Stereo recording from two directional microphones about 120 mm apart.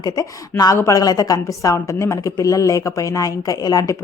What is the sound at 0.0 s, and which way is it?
Speech, 30° left (ahead or behind).